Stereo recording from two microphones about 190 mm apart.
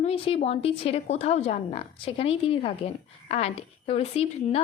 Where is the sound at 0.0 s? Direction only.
30° left (ahead or behind).